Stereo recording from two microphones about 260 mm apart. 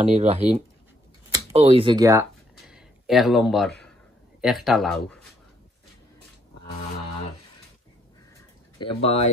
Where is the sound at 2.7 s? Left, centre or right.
Centre.